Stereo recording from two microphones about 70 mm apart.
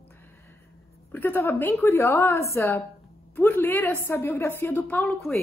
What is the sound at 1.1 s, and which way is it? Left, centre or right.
A woman's voice, left.